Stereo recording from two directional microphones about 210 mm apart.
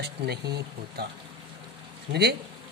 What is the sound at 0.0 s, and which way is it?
Speech, 50° right (ahead or behind).